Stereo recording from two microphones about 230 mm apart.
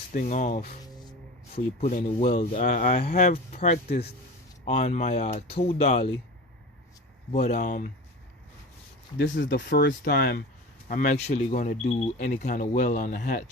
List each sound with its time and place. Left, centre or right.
0.1 s speech: left
1.8 s speech: left
3.8 s speech: left
4.6 s speech: left
7.5 s speech: left
9.1 s speech: left